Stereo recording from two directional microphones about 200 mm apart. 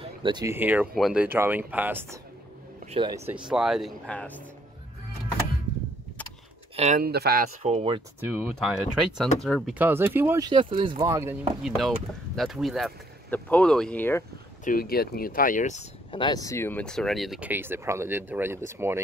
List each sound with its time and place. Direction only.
0.0 s speech: 25° right (ahead or behind)
2.9 s speech: 25° right (ahead or behind)
3.3 s speech: 5° right (ahead or behind)
6.8 s speech: 35° right (ahead or behind)
7.1 s speech: 50° right (ahead or behind)
7.6 s speech: 30° right (ahead or behind)
8.2 s speech: 10° right (ahead or behind)
9.8 s speech: 10° right (ahead or behind)
11.6 s speech: centre (ahead or behind)
14.6 s speech: 45° left (ahead or behind); by 18.9 s 10° right (ahead or behind)